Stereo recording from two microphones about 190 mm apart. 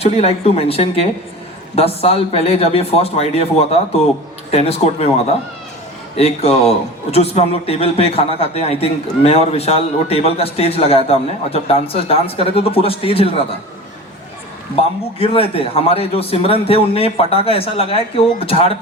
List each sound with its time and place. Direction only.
0.0 s a man's voice: 35° left (ahead or behind)
4.5 s a man's voice: 30° left (ahead or behind)
6.1 s a man's voice: 35° left (ahead or behind)
14.8 s a man's voice: 30° left (ahead or behind)